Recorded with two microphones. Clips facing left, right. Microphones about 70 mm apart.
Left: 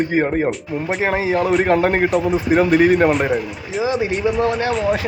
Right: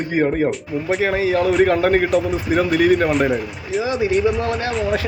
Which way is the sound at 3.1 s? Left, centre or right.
Centre.